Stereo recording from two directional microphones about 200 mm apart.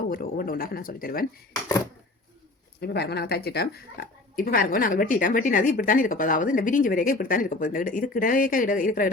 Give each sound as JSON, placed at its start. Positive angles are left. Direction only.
{"t": 0.1, "sound": "speech", "side_deg": 45}
{"t": 2.8, "sound": "a woman's voice", "side_deg": 55}